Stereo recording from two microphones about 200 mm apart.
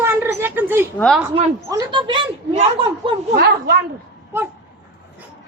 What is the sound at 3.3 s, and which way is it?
Speech, 50° right (ahead or behind).